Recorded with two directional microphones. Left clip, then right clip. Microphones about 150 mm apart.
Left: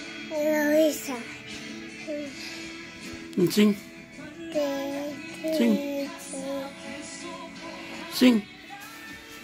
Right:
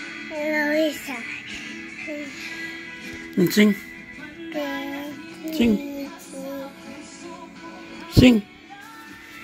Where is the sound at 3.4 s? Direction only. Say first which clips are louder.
Right 4 dB; 40° right (ahead or behind).